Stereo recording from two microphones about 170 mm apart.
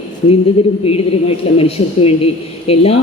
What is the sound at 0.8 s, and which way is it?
A woman's voice, 35° left (ahead or behind).